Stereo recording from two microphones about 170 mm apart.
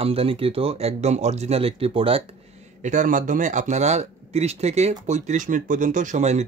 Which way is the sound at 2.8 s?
45° right (ahead or behind).